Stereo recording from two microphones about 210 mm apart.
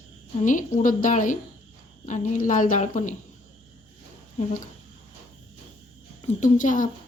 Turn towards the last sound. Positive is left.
turn(degrees=40)  # may be behind; listen again after turning